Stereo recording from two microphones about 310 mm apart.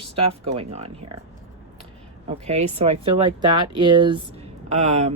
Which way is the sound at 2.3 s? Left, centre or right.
Right.